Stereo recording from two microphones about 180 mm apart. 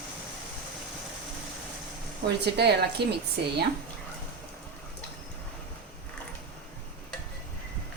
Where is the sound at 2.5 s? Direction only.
65° right (ahead or behind).